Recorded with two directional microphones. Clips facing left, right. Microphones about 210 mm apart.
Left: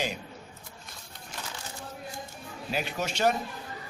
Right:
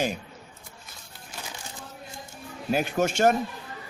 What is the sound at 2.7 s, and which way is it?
Speech, 50° right (ahead or behind).